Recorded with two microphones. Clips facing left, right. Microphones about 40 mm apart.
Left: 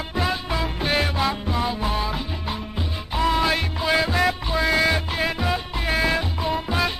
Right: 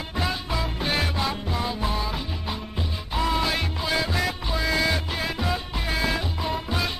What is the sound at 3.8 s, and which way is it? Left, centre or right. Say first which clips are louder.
Music: left 6 dB; left.